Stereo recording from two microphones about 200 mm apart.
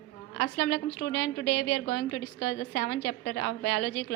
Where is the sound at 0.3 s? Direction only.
70° left (ahead or behind).